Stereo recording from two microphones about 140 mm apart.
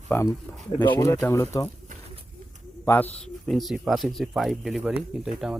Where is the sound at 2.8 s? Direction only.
15° left (ahead or behind).